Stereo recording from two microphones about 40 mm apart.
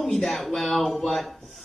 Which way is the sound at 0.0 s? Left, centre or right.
Centre.